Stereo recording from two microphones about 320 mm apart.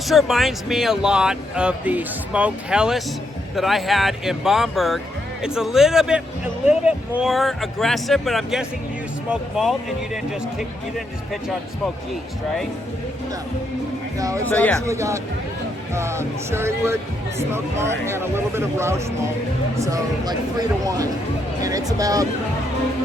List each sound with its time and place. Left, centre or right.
0.1 s speech: centre
14.2 s speech: centre
14.5 s speech: centre
14.8 s speech: centre